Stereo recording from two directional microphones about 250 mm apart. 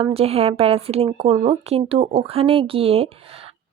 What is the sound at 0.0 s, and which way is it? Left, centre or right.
Speech, right.